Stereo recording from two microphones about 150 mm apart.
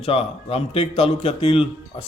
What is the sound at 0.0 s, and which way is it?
A man's voice, 40° left (ahead or behind).